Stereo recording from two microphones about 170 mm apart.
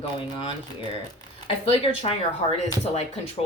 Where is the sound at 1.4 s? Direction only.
35° left (ahead or behind).